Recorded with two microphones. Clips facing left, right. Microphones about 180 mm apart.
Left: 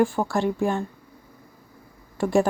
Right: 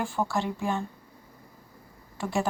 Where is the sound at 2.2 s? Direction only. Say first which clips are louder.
Left 8 dB; 50° left (ahead or behind).